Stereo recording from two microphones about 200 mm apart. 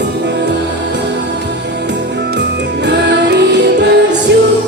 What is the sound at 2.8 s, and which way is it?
Music, 60° right (ahead or behind).